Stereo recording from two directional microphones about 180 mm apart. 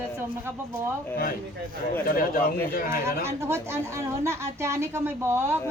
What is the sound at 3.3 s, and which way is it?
Speech, 15° right (ahead or behind).